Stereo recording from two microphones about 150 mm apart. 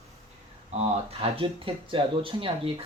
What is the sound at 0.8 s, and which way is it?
Speech, 40° right (ahead or behind).